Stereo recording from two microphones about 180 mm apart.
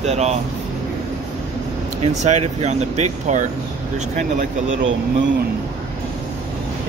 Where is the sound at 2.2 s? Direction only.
40° right (ahead or behind).